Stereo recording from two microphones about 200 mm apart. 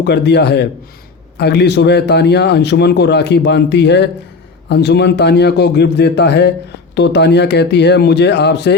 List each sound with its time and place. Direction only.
0.0 s a man's voice: 55° left (ahead or behind)